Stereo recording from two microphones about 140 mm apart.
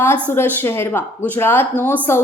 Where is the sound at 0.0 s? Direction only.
15° left (ahead or behind).